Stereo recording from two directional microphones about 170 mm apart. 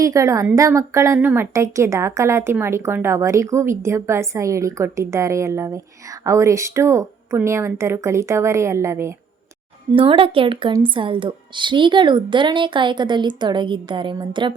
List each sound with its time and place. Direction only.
0.0 s a woman's voice: 20° right (ahead or behind)
9.9 s a woman's voice: 30° right (ahead or behind)